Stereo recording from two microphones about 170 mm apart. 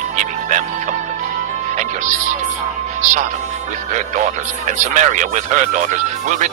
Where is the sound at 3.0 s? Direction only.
45° right (ahead or behind).